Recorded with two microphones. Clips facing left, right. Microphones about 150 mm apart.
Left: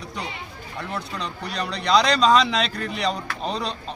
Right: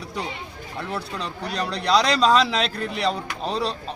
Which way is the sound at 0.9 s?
35° right (ahead or behind).